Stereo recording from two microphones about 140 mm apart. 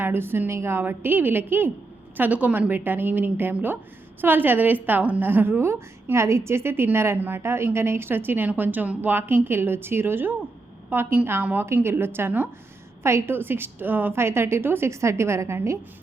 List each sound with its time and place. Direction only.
0.0 s a woman's voice: 15° right (ahead or behind)